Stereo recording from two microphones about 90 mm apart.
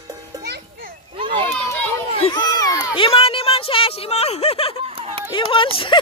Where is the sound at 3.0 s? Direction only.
90° left.